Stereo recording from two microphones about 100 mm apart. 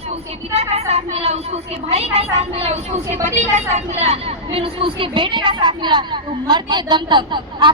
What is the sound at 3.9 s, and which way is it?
A woman's voice, 90° right.